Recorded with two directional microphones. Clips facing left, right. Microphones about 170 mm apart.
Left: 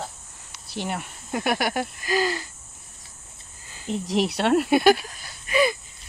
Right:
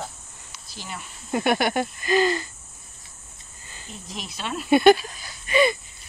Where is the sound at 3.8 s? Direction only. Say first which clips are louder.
Left 14 dB; 75° left (ahead or behind).